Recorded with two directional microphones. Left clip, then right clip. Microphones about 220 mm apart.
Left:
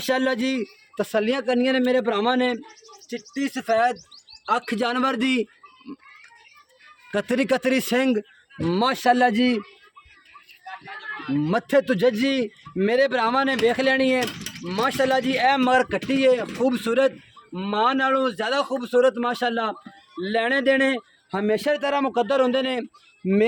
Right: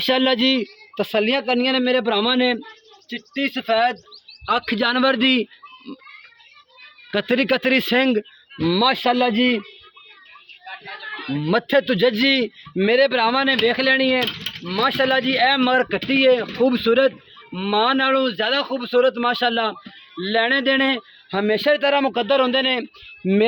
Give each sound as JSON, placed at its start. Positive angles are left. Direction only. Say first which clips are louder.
{"t": 0.0, "sound": "a man's voice", "louder": "right 5 dB", "side_deg": -30}
{"t": 3.3, "sound": "speech", "louder": "right 3 dB", "side_deg": -20}
{"t": 7.1, "sound": "speech", "louder": "right 3 dB", "side_deg": -20}
{"t": 10.7, "sound": "chicken", "louder": "right 2 dB", "side_deg": -40}
{"t": 11.5, "sound": "a man's voice", "louder": "right 3 dB", "side_deg": -30}
{"t": 14.2, "sound": "mechanisms", "louder": "right 4 dB", "side_deg": -40}
{"t": 14.7, "sound": "a man's voice", "louder": "right 3 dB", "side_deg": -20}